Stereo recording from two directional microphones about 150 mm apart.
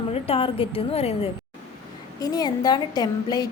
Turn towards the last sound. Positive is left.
turn(degrees=25)  # may be behind; listen again after turning